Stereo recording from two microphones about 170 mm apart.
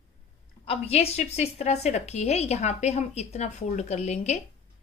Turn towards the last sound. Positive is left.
turn(degrees=40)  # may be behind; listen again after turning